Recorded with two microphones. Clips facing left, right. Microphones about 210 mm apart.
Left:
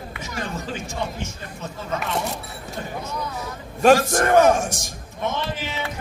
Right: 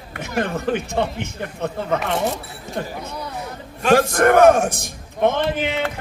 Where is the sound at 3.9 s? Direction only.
60° right (ahead or behind).